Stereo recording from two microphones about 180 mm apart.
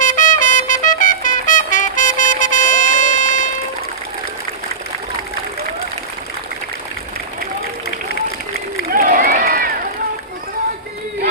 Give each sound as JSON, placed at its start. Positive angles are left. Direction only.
{"t": 0.0, "sound": "trumpet", "side_deg": 45}
{"t": 8.9, "sound": "crowd", "side_deg": -55}